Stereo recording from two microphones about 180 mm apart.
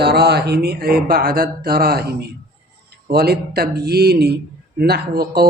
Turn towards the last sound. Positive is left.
turn(degrees=-60)  # may be behind; listen again after turning